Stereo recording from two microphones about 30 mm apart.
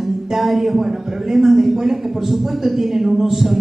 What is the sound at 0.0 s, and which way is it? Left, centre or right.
Speech, centre.